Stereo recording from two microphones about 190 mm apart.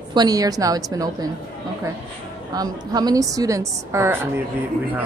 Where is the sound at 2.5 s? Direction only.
20° right (ahead or behind).